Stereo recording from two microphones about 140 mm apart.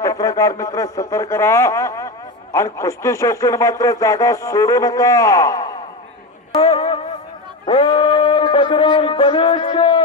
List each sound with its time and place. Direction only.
0.0 s a man's voice: 25° left (ahead or behind)
6.6 s music: 45° left (ahead or behind)
7.6 s a sound: 40° left (ahead or behind)